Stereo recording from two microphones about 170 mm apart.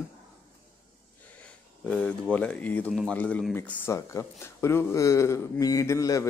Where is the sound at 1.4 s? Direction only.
5° left (ahead or behind).